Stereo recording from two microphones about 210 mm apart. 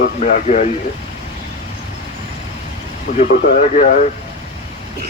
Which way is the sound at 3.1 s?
35° left (ahead or behind).